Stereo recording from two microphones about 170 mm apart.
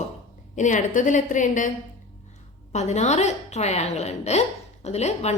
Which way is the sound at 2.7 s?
40° left (ahead or behind).